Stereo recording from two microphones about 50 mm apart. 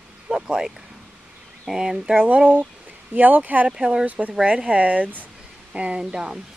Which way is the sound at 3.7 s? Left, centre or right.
Centre.